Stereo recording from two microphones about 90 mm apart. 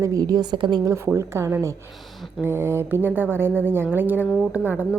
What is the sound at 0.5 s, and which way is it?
Speech, 60° right (ahead or behind).